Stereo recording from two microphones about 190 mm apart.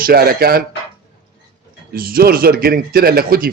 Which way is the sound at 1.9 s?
50° right (ahead or behind).